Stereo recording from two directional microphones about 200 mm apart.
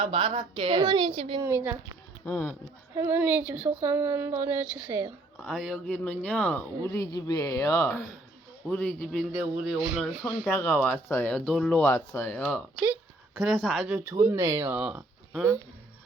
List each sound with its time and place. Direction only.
0.0 s a woman's voice: 25° right (ahead or behind)
1.4 s speech: 15° right (ahead or behind)
2.2 s speech: 10° left (ahead or behind)
2.9 s speech: 10° right (ahead or behind)
5.4 s speech: centre (ahead or behind)
12.9 s speech: 5° right (ahead or behind)
13.9 s speech: 10° right (ahead or behind)